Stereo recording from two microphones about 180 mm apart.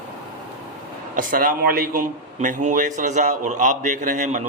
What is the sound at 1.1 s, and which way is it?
A man's voice, 50° right (ahead or behind).